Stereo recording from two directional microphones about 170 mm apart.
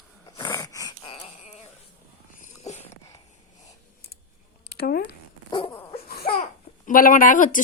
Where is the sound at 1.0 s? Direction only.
35° left (ahead or behind).